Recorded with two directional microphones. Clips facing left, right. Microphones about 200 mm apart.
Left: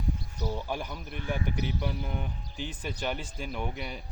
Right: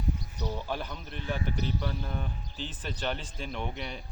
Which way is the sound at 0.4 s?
10° left (ahead or behind).